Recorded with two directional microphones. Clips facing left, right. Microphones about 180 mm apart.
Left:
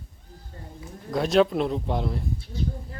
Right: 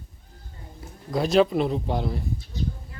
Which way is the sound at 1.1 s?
Centre (ahead or behind).